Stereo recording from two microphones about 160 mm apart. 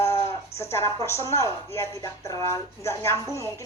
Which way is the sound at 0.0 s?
15° left (ahead or behind).